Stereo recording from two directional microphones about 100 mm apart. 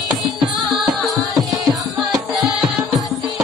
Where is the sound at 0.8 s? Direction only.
Centre (ahead or behind).